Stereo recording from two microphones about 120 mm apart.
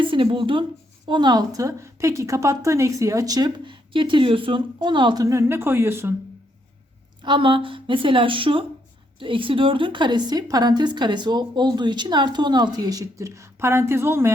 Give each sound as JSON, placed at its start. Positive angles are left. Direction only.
{"t": 0.0, "sound": "a woman's voice", "side_deg": -45}
{"t": 7.2, "sound": "a woman's voice", "side_deg": -45}